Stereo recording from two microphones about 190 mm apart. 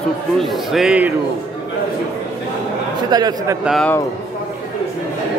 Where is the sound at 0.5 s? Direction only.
Centre (ahead or behind).